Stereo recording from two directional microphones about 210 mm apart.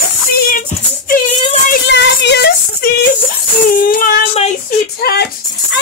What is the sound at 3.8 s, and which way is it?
Child singing, 40° left (ahead or behind).